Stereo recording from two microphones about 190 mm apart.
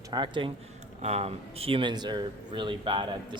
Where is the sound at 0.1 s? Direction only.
25° right (ahead or behind).